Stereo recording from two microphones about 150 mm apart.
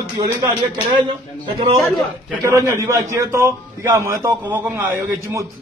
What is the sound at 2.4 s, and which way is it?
A man's voice, 20° right (ahead or behind).